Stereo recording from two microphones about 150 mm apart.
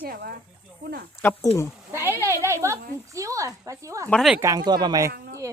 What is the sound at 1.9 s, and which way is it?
Speech, 15° right (ahead or behind).